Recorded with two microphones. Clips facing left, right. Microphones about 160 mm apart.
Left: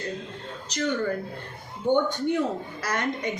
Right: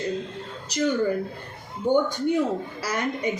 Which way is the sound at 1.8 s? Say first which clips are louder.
Right 1 dB; 10° right (ahead or behind).